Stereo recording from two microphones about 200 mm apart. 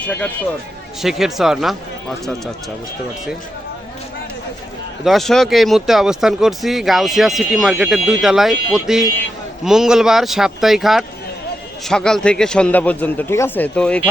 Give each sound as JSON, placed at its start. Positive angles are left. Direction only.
{"t": 0.0, "sound": "speech", "side_deg": 5}
{"t": 5.0, "sound": "speech", "side_deg": 0}